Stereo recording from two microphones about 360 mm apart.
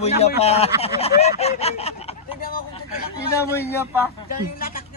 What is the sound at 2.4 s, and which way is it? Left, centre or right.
Vehicle, left.